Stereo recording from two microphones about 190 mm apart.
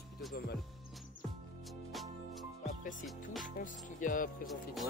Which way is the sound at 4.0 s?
45° left (ahead or behind).